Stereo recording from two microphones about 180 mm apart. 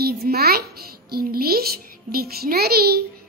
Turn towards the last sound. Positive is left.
turn(degrees=-60)  # may be behind; listen again after turning